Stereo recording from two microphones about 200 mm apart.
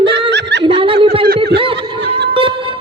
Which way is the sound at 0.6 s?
25° right (ahead or behind).